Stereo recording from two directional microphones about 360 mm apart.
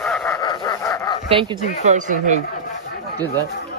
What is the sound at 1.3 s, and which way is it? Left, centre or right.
Speech, centre.